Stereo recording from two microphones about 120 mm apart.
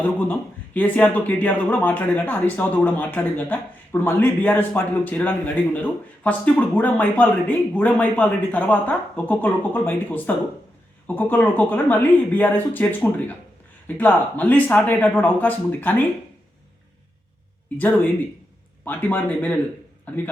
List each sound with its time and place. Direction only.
0.0 s speech: 15° left (ahead or behind)
17.7 s speech: 15° left (ahead or behind)